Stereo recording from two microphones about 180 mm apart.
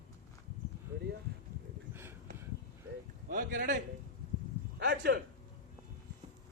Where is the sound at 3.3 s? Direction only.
50° right (ahead or behind).